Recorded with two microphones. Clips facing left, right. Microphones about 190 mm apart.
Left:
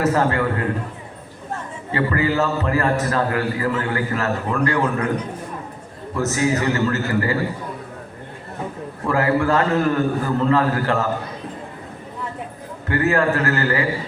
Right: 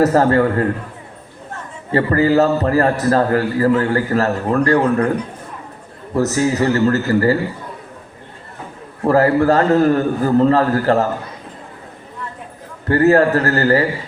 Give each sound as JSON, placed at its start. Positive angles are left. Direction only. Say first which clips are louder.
{"t": 0.0, "sound": "a man's voice", "louder": "right 6 dB", "side_deg": -40}
{"t": 1.9, "sound": "a man's voice", "louder": "right 6 dB", "side_deg": -40}
{"t": 6.1, "sound": "a man's voice", "louder": "right 4 dB", "side_deg": -35}
{"t": 9.0, "sound": "a man's voice", "louder": "right 6 dB", "side_deg": -40}
{"t": 12.9, "sound": "a man's voice", "louder": "right 7 dB", "side_deg": -40}